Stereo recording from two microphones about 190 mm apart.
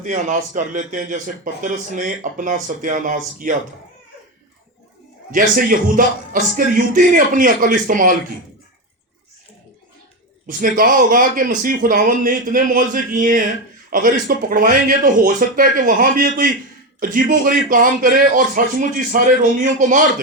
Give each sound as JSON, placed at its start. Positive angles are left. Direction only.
{"t": 0.0, "sound": "a man's voice", "side_deg": -40}
{"t": 5.3, "sound": "a man's voice", "side_deg": -45}
{"t": 10.4, "sound": "a man's voice", "side_deg": -50}